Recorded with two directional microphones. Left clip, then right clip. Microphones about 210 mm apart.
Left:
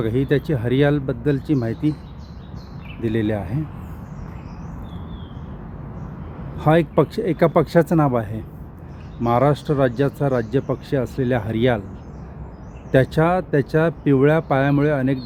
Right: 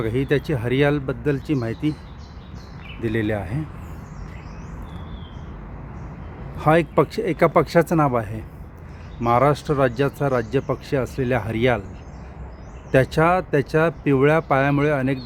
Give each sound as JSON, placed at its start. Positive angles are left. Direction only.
{"t": 0.0, "sound": "speech", "side_deg": -5}
{"t": 3.0, "sound": "speech", "side_deg": -5}
{"t": 6.6, "sound": "speech", "side_deg": -5}
{"t": 12.9, "sound": "speech", "side_deg": -10}